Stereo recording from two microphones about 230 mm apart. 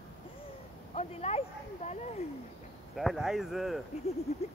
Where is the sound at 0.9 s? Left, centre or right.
Left.